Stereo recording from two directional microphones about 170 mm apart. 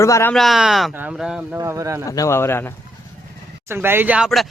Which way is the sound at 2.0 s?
20° left (ahead or behind).